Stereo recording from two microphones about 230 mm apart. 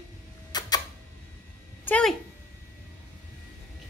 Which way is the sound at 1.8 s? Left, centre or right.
Centre.